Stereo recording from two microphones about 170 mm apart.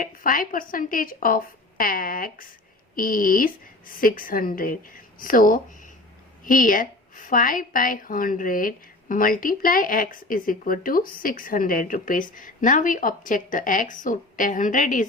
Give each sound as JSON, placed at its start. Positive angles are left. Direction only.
{"t": 0.0, "sound": "a woman's voice", "side_deg": 55}